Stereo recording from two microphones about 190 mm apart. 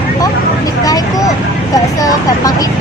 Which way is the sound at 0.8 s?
20° left (ahead or behind).